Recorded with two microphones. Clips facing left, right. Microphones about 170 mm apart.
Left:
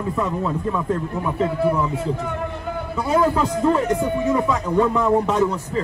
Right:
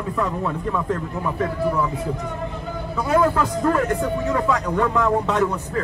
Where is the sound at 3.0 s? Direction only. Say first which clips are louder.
Even; 15° left (ahead or behind).